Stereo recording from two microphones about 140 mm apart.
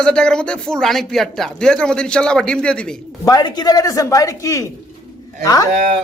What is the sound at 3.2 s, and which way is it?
Speech, 30° left (ahead or behind).